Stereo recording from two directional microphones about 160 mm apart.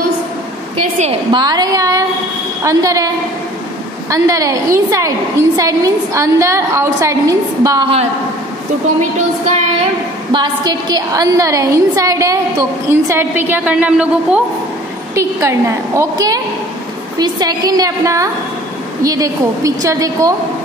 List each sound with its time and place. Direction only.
1.3 s a woman's voice: 25° right (ahead or behind)
4.1 s a woman's voice: 20° right (ahead or behind)
10.3 s a woman's voice: 25° right (ahead or behind); by 14.4 s 5° right (ahead or behind)
15.1 s a woman's voice: 20° right (ahead or behind)